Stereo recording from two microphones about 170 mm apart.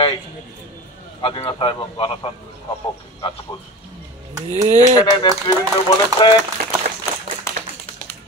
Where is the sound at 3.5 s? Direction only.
30° left (ahead or behind).